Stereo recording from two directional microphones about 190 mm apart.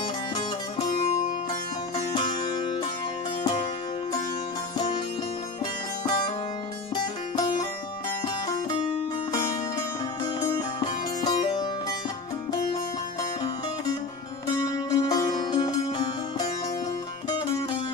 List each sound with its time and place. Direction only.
0.0 s music: 25° left (ahead or behind)
2.0 s music: 35° left (ahead or behind)
2.4 s music: 25° left (ahead or behind)
4.7 s music: 25° left (ahead or behind)
9.3 s music: 20° left (ahead or behind)
13.2 s music: 20° left (ahead or behind)